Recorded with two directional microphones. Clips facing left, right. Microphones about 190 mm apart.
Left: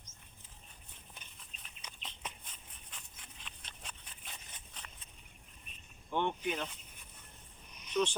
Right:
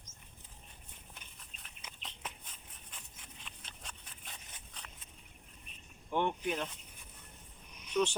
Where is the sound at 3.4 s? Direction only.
Centre (ahead or behind).